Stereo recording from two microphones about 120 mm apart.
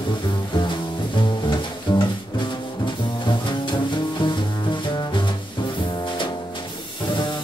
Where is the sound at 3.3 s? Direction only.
40° left (ahead or behind).